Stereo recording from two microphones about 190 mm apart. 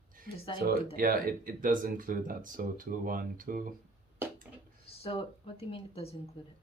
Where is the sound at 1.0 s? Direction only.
50° right (ahead or behind).